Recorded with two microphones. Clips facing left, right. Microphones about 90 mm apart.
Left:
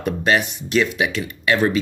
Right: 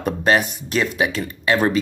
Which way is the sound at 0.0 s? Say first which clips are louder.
Right 1 dB; 40° right (ahead or behind).